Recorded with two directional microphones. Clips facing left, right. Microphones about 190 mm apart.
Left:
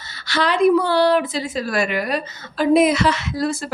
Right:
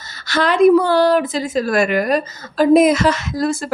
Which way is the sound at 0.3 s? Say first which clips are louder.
Right 4 dB; 45° right (ahead or behind).